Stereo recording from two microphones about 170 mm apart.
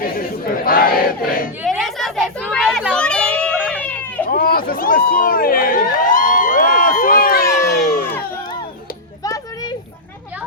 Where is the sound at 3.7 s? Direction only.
10° left (ahead or behind).